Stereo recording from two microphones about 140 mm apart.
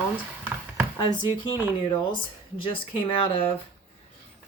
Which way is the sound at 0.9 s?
30° left (ahead or behind).